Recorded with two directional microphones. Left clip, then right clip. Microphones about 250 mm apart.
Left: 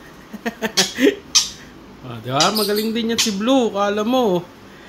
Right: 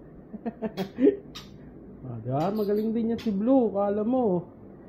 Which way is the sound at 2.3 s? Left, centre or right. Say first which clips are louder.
Left 9 dB; centre.